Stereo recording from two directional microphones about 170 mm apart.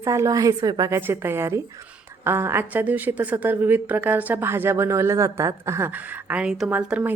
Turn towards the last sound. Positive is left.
turn(degrees=-5)  # may be behind; listen again after turning